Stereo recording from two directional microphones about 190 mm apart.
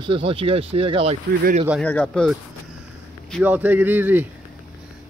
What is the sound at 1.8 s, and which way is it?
Speech, 5° left (ahead or behind).